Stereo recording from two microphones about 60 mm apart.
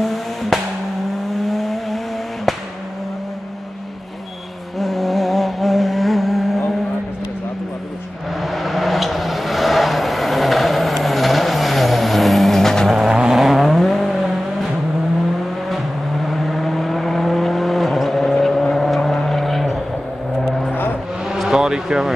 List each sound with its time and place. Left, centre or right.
0.0 s vehicle: centre
4.7 s vehicle: centre
8.4 s vehicle: centre
12.9 s vehicle: centre
16.3 s vehicle: centre
20.7 s vehicle: left
21.3 s vehicle: centre